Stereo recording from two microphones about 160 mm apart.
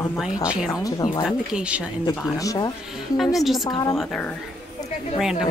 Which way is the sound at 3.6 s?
25° left (ahead or behind).